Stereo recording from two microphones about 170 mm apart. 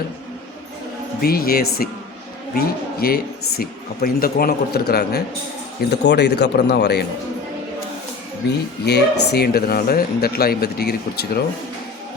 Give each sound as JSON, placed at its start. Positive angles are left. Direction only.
{"t": 1.2, "sound": "a man's voice", "side_deg": 60}
{"t": 5.9, "sound": "speech", "side_deg": 85}
{"t": 8.9, "sound": "a man's voice", "side_deg": 75}